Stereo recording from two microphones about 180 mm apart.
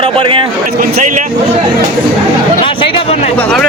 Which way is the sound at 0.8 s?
45° right (ahead or behind).